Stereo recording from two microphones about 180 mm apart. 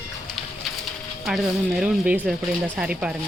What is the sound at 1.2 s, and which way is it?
Speech, centre (ahead or behind).